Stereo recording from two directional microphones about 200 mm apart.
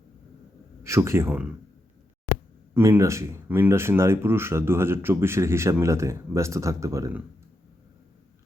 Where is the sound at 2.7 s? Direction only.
15° right (ahead or behind).